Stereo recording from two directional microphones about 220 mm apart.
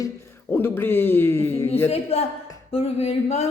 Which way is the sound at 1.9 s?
25° left (ahead or behind).